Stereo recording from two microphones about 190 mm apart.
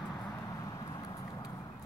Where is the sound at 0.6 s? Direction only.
20° left (ahead or behind).